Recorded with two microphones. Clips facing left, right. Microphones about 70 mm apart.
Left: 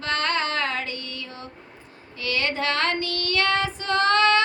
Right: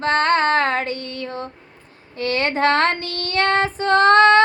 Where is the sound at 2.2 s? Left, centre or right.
Right.